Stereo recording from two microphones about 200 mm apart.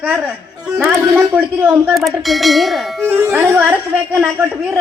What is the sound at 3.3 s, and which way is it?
Speech, 10° right (ahead or behind).